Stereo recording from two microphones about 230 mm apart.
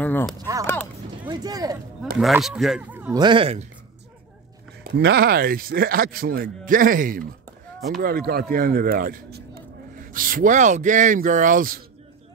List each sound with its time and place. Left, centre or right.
0.0 s speech: centre
1.2 s speech: centre
2.1 s speech: centre
3.2 s speech: right
4.8 s speech: right